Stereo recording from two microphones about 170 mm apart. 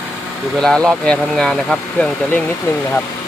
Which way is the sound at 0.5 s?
5° left (ahead or behind).